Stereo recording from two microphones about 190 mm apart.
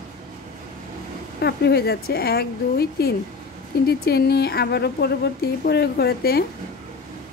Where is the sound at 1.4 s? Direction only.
60° left (ahead or behind).